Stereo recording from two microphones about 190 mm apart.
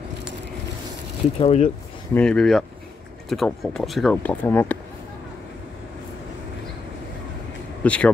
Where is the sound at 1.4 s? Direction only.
35° left (ahead or behind).